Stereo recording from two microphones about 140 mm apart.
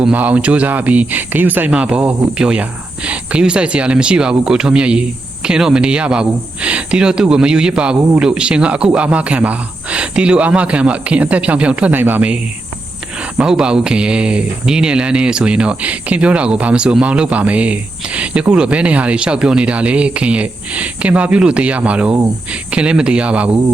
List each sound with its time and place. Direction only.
0.0 s speech: 10° right (ahead or behind)
13.4 s speech: 5° right (ahead or behind)